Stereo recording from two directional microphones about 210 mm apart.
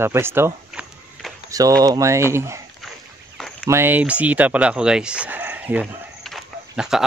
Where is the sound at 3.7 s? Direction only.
10° right (ahead or behind).